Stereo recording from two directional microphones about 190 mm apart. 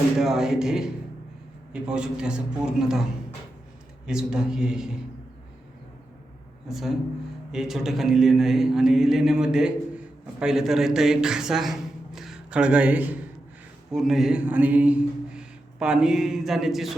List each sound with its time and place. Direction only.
0.2 s a man's voice: centre (ahead or behind)
6.7 s a man's voice: centre (ahead or behind)